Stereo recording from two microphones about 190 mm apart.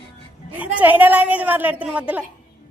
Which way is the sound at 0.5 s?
10° right (ahead or behind).